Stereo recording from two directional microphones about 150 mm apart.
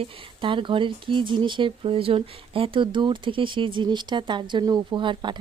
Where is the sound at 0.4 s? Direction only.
35° right (ahead or behind).